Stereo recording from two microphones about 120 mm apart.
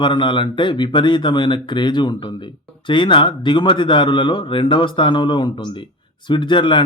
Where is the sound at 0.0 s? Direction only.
40° left (ahead or behind).